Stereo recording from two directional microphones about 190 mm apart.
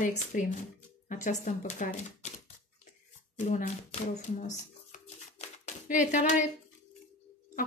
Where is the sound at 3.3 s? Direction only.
40° left (ahead or behind).